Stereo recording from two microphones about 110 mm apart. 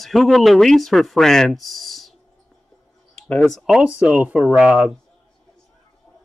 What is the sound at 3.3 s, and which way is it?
Speech, 10° left (ahead or behind).